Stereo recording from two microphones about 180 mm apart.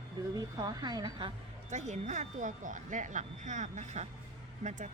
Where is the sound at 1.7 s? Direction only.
40° right (ahead or behind).